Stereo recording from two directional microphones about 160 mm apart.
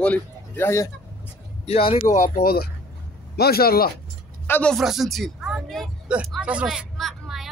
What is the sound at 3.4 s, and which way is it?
Speech, 75° left (ahead or behind).